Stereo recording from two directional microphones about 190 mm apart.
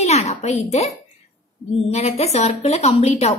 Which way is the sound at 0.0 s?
35° left (ahead or behind).